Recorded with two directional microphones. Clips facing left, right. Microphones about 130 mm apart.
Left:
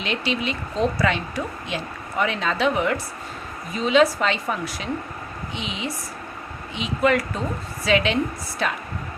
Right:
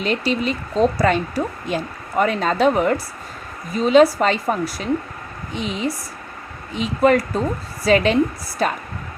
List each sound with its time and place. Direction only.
0.0 s a woman's voice: 40° right (ahead or behind)